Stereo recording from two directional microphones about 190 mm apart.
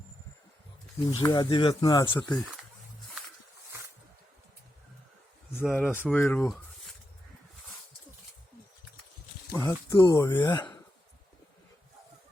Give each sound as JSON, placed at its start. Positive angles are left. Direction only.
{"t": 1.0, "sound": "speech", "side_deg": 20}
{"t": 5.5, "sound": "speech", "side_deg": 10}
{"t": 9.6, "sound": "speech", "side_deg": 20}